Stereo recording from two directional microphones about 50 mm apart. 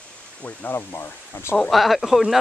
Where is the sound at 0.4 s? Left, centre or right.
Left.